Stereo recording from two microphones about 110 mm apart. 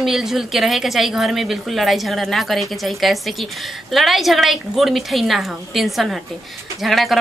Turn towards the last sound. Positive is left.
turn(degrees=0)  # may be behind; listen again after turning